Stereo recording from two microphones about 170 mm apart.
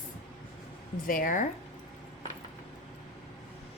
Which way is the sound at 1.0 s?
55° left (ahead or behind).